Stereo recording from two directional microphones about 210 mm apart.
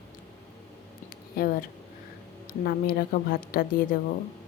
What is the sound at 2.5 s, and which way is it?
A woman's voice, 45° left (ahead or behind).